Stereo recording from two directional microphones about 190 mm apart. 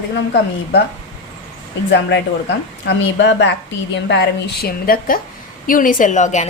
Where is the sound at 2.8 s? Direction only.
65° left (ahead or behind).